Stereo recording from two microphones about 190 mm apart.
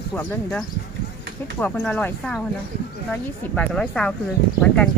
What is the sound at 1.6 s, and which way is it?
Speech, 5° left (ahead or behind).